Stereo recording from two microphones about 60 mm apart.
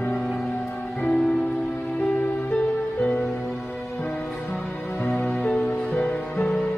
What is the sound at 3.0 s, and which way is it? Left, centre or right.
Music, left.